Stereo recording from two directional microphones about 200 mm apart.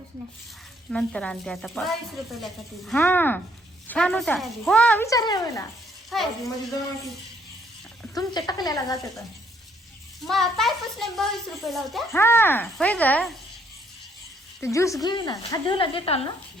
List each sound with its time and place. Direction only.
0.9 s a woman's voice: 5° left (ahead or behind)
5.0 s speech: 20° left (ahead or behind)
6.1 s a woman's voice: centre (ahead or behind)
8.1 s a woman's voice: 20° left (ahead or behind)
10.2 s a woman's voice: centre (ahead or behind)
12.1 s speech: 10° left (ahead or behind)
14.6 s a woman's voice: 15° left (ahead or behind)